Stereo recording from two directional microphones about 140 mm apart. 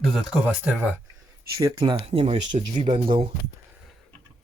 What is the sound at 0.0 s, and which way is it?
Speech, centre (ahead or behind).